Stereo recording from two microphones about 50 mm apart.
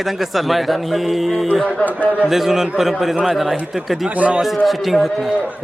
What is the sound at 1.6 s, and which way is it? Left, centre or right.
Speech, left.